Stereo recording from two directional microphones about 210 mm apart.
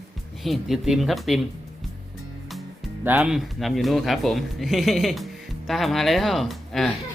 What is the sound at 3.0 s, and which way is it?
Speech, 5° right (ahead or behind).